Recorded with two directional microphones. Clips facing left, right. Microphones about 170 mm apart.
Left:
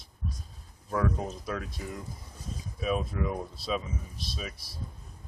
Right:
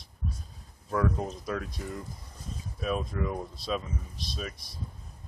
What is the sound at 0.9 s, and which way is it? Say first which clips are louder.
Speech: right 1 dB; centre (ahead or behind).